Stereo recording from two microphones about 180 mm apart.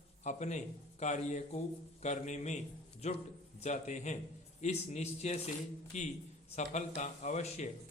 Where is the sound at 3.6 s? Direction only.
40° left (ahead or behind).